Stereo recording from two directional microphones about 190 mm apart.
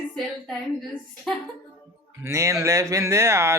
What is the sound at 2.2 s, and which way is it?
Speech, 15° right (ahead or behind).